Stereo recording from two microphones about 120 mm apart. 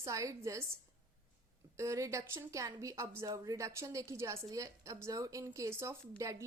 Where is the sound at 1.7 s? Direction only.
25° right (ahead or behind).